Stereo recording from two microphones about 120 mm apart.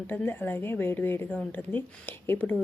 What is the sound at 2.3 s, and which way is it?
Speech, 15° left (ahead or behind).